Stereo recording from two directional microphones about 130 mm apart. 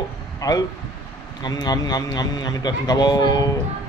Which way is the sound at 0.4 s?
30° left (ahead or behind).